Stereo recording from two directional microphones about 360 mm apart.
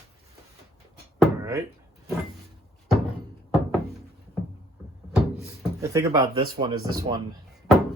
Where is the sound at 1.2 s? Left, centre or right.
Centre.